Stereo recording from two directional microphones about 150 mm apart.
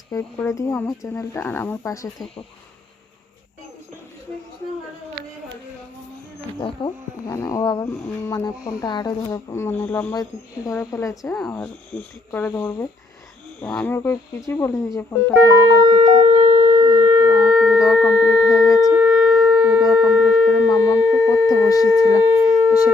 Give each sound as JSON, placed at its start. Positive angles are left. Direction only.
{"t": 0.1, "sound": "speech", "side_deg": 20}
{"t": 6.6, "sound": "speech", "side_deg": 25}
{"t": 10.2, "sound": "speech", "side_deg": 25}
{"t": 11.3, "sound": "speech", "side_deg": 5}
{"t": 15.7, "sound": "speech", "side_deg": -30}
{"t": 16.0, "sound": "a sound", "side_deg": -45}
{"t": 16.6, "sound": "shofar", "side_deg": -25}
{"t": 17.4, "sound": "shofar", "side_deg": 0}
{"t": 18.1, "sound": "a sound", "side_deg": -5}
{"t": 18.8, "sound": "shofar", "side_deg": -5}
{"t": 20.7, "sound": "a sound", "side_deg": 15}
{"t": 22.2, "sound": "shofar", "side_deg": -15}